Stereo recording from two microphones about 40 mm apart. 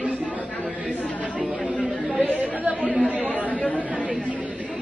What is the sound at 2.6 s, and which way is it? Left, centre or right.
Chatter, right.